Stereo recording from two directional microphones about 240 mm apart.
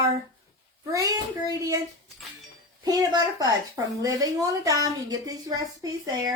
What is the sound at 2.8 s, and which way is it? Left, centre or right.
A woman's voice, centre.